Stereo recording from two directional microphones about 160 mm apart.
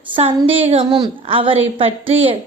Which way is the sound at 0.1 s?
35° right (ahead or behind).